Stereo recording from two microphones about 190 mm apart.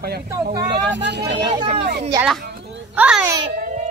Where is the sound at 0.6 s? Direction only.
65° right (ahead or behind).